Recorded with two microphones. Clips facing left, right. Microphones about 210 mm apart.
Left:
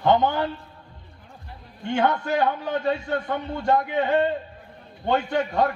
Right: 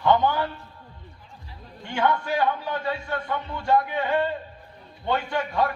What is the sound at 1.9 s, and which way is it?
A man's voice, 20° left (ahead or behind).